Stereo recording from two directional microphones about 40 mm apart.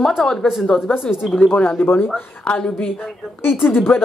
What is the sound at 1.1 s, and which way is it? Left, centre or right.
Speech, left.